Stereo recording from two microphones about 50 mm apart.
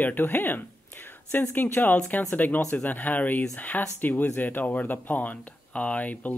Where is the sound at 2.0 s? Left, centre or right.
Left.